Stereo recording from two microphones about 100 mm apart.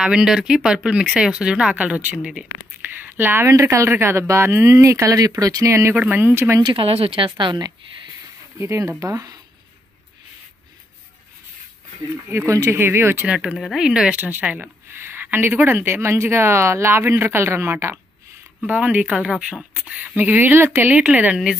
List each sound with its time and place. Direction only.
0.0 s a woman's voice: 5° right (ahead or behind); by 5.9 s 30° right (ahead or behind)
5.9 s a woman's voice: 20° right (ahead or behind)
6.6 s speech: 60° right (ahead or behind)
8.5 s a woman's voice: 30° right (ahead or behind)
12.3 s a woman's voice: 30° right (ahead or behind)
18.7 s a woman's voice: 15° right (ahead or behind)